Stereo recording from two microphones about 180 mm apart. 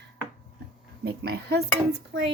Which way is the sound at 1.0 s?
60° right (ahead or behind).